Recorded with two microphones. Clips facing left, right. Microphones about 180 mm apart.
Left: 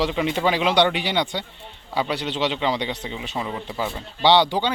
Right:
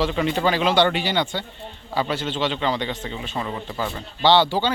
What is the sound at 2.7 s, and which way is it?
Speech, 15° left (ahead or behind).